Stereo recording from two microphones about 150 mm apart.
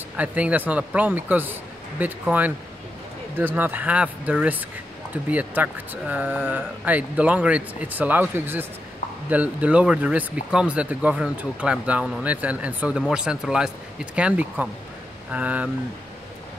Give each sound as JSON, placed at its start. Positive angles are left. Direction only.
{"t": 0.2, "sound": "speech", "side_deg": -10}
{"t": 3.5, "sound": "speech", "side_deg": -10}